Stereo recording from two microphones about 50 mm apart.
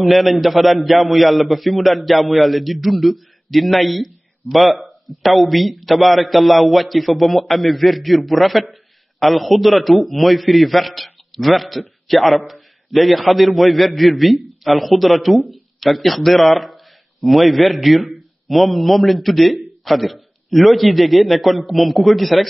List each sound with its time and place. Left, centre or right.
0.0 s a man's voice: centre